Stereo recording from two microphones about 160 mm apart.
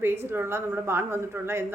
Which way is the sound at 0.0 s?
15° right (ahead or behind).